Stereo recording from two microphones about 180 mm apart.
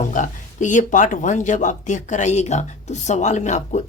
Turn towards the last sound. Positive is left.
turn(degrees=40)  # may be behind; listen again after turning